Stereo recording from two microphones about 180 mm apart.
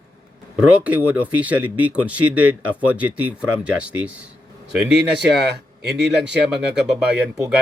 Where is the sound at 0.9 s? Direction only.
10° right (ahead or behind).